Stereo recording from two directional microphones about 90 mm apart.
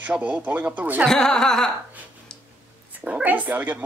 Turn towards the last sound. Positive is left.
turn(degrees=-20)  # may be behind; listen again after turning